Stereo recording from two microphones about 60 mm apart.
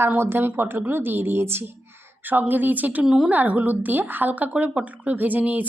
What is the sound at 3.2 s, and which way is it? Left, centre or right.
Speech, right.